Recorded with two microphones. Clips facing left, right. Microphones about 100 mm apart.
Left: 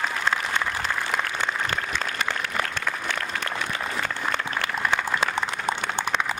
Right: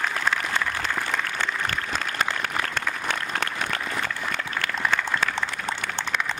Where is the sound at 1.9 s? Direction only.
40° right (ahead or behind).